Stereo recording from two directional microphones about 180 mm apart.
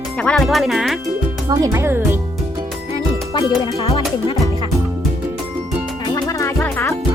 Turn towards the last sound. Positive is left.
turn(degrees=15)  # may be behind; listen again after turning